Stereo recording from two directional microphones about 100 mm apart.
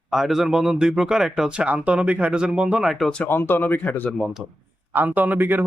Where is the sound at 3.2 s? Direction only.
20° left (ahead or behind).